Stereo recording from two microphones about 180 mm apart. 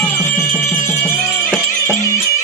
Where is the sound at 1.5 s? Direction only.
10° left (ahead or behind).